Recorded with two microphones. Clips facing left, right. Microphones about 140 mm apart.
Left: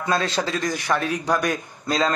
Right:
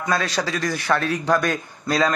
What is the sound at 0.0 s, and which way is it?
A man's voice, 20° left (ahead or behind).